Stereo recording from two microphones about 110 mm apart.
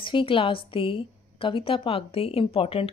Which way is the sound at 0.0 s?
50° left (ahead or behind).